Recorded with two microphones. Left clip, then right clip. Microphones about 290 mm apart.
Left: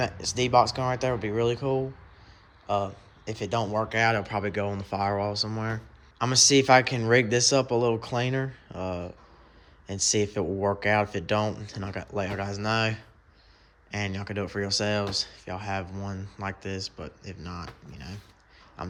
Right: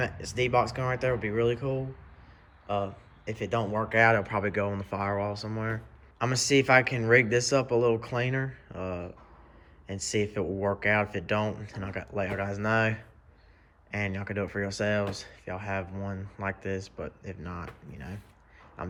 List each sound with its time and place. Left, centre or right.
0.0 s speech: centre